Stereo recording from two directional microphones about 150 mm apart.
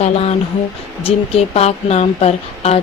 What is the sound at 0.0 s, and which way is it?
Speech, 45° left (ahead or behind).